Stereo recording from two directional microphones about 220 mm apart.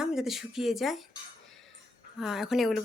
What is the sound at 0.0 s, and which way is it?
Speech, 5° right (ahead or behind).